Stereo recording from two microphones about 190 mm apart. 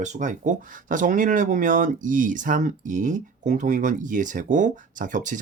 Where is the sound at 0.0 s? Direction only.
40° right (ahead or behind).